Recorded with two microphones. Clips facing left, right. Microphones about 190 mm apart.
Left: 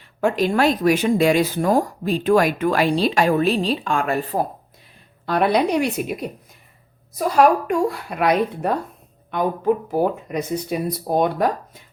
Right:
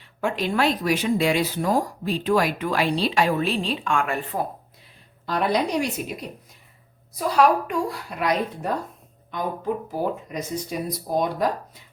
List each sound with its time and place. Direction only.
0.2 s speech: 45° left (ahead or behind)
5.2 s speech: 60° left (ahead or behind)
7.3 s speech: 50° left (ahead or behind)
9.9 s speech: 60° left (ahead or behind)